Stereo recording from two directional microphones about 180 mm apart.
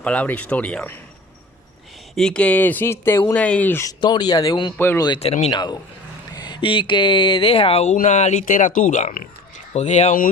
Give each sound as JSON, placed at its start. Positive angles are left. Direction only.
{"t": 0.0, "sound": "speech", "side_deg": 10}
{"t": 2.1, "sound": "speech", "side_deg": 5}
{"t": 4.8, "sound": "speech", "side_deg": 10}
{"t": 5.0, "sound": "speech", "side_deg": 30}